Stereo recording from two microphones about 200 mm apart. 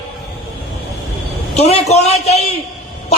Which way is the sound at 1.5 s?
30° left (ahead or behind).